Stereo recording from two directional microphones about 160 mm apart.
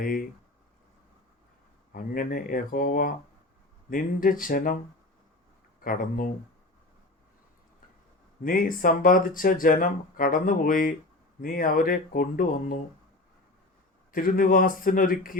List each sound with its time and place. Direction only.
1.9 s speech: 65° left (ahead or behind)
5.8 s speech: 60° left (ahead or behind)
8.4 s speech: 60° left (ahead or behind)
14.1 s speech: 60° left (ahead or behind)